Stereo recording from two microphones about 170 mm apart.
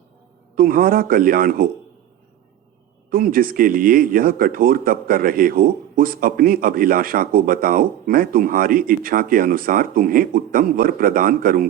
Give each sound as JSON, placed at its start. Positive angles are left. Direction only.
{"t": 0.5, "sound": "speech", "side_deg": -55}
{"t": 3.1, "sound": "speech", "side_deg": -55}